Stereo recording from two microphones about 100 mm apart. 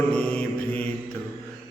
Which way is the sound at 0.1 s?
10° left (ahead or behind).